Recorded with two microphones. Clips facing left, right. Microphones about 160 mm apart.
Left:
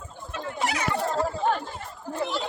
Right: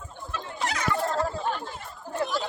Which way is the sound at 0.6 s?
10° left (ahead or behind).